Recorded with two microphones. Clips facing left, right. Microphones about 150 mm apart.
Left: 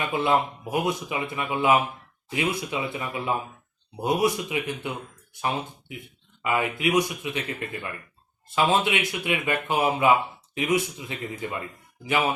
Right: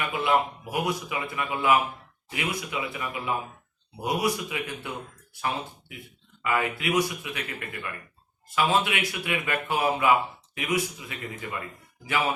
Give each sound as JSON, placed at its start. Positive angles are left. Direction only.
{"t": 0.3, "sound": "speech", "side_deg": 25}